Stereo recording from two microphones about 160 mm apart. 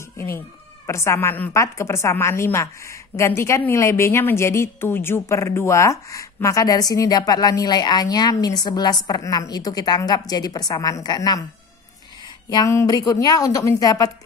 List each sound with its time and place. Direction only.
0.8 s a woman's voice: 15° left (ahead or behind)
12.4 s a woman's voice: 20° left (ahead or behind)